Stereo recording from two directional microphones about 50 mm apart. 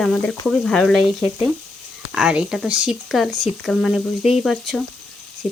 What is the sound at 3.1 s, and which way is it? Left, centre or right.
Speech, centre.